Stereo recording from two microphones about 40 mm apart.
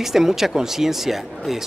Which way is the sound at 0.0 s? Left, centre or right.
Centre.